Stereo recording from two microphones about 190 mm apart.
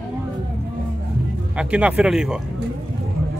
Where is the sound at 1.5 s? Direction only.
5° right (ahead or behind).